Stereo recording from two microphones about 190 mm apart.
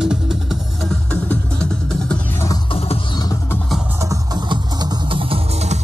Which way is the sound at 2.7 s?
30° left (ahead or behind).